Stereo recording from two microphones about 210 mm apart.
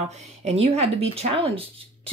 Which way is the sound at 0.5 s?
30° right (ahead or behind).